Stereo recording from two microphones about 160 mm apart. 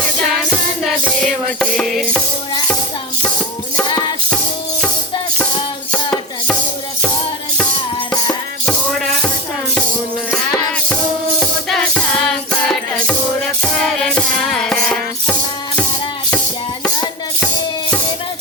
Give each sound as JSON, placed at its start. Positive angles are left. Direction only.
{"t": 1.2, "sound": "music", "side_deg": 5}
{"t": 3.8, "sound": "music", "side_deg": 25}
{"t": 5.9, "sound": "music", "side_deg": 10}
{"t": 10.3, "sound": "music", "side_deg": 5}